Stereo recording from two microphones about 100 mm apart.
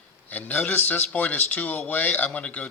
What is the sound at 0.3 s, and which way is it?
Speech, 15° left (ahead or behind).